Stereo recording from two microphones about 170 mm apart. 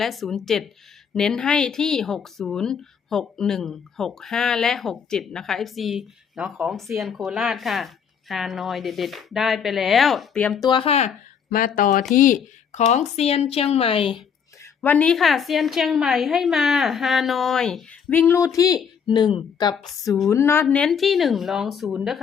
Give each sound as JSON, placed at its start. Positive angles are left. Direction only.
{"t": 0.0, "sound": "speech", "side_deg": 0}
{"t": 10.6, "sound": "speech", "side_deg": 25}
{"t": 11.4, "sound": "speech", "side_deg": 55}
{"t": 14.6, "sound": "speech", "side_deg": 10}
{"t": 19.7, "sound": "speech", "side_deg": 0}
{"t": 20.3, "sound": "speech", "side_deg": 15}